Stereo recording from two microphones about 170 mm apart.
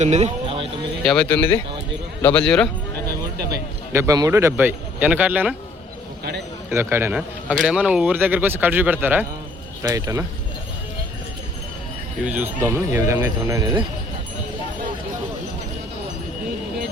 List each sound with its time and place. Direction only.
0.0 s a sound: 40° right (ahead or behind)
1.0 s speech: 5° left (ahead or behind)
3.5 s a man's voice: 20° right (ahead or behind)
6.7 s a man's voice: 15° right (ahead or behind)
12.2 s a man's voice: 10° right (ahead or behind)